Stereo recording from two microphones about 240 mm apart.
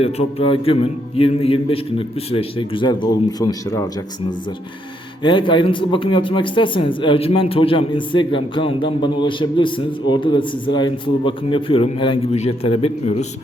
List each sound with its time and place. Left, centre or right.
0.0 s speech: left
5.2 s speech: centre